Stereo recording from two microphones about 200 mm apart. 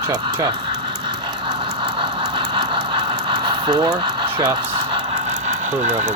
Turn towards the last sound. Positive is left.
turn(degrees=-35)  # may be behind; listen again after turning